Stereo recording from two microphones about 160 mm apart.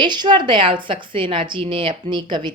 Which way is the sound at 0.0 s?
30° right (ahead or behind).